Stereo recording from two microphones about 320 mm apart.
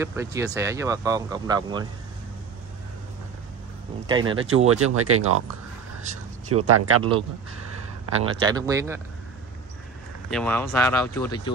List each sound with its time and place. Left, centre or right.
0.0 s speech: centre
4.1 s speech: centre
4.6 s speech: right
6.7 s speech: right
7.0 s speech: centre
10.3 s speech: centre